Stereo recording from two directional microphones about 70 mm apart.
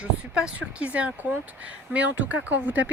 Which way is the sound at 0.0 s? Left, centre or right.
Centre.